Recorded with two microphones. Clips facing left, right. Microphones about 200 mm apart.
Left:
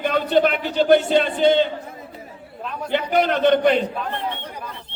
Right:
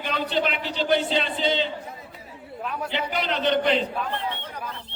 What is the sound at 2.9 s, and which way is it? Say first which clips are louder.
Speech: left 10 dB; 50° left (ahead or behind).